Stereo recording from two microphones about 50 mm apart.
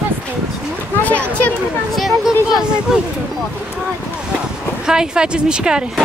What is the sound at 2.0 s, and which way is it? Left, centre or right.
Speech, centre.